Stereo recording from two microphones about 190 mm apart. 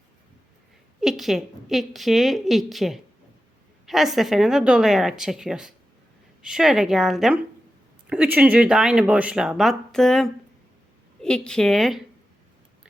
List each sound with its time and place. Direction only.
1.0 s speech: centre (ahead or behind)